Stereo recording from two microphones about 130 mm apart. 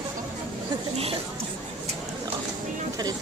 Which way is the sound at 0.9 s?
50° right (ahead or behind).